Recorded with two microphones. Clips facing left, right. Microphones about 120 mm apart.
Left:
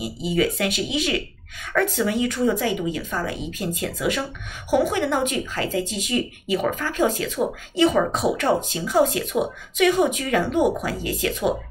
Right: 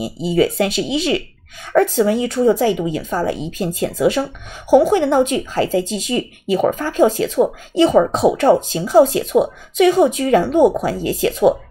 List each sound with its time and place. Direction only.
0.0 s speech: 30° right (ahead or behind)